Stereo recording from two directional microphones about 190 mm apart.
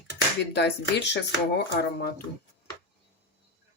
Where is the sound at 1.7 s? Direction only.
60° left (ahead or behind).